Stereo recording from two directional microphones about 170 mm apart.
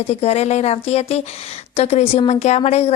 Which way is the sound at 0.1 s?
40° left (ahead or behind).